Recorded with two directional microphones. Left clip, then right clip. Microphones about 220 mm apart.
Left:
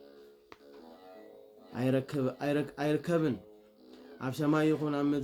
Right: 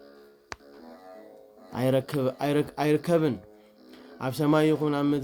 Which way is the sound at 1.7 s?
40° right (ahead or behind).